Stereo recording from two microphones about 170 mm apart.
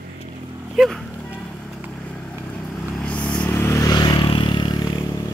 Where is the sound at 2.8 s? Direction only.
5° left (ahead or behind); by 4.9 s 25° left (ahead or behind).